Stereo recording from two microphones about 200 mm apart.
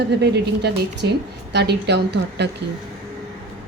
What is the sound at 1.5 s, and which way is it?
Speech, 55° right (ahead or behind).